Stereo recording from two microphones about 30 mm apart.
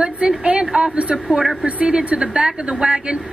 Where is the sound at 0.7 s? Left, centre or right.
Right.